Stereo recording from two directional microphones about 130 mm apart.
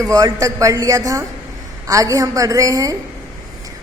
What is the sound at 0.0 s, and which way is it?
A woman's voice, 25° right (ahead or behind).